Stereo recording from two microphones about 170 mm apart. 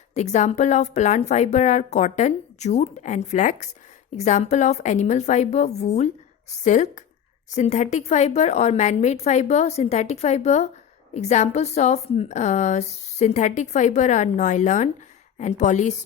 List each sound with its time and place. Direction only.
0.1 s a woman's voice: 45° left (ahead or behind)